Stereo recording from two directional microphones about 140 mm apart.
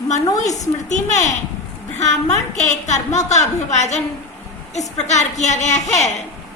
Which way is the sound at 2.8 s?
55° left (ahead or behind).